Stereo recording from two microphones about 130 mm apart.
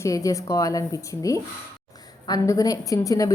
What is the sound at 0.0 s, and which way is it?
A woman's voice, 25° left (ahead or behind).